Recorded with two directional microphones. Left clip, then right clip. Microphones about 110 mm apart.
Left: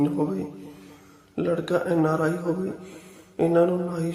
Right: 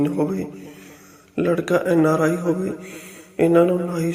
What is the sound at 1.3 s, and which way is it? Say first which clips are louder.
A man's voice: right 5 dB; 30° right (ahead or behind).